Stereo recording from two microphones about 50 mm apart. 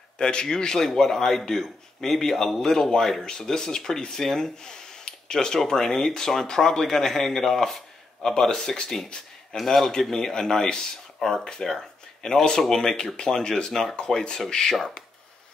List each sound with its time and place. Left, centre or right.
0.2 s speech: centre